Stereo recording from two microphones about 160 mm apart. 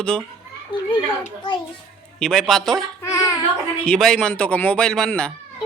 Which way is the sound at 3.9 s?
5° left (ahead or behind).